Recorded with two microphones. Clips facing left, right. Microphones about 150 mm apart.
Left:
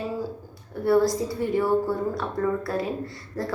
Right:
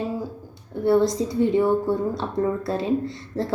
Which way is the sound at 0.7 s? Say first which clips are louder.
Right 1 dB; 25° right (ahead or behind).